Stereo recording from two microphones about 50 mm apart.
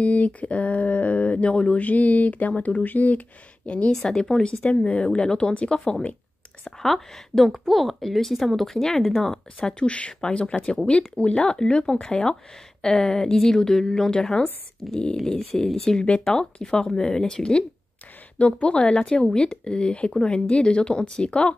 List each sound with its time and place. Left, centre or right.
0.0 s speech: left
3.9 s speech: centre
6.8 s a woman's voice: centre
9.6 s a woman's voice: left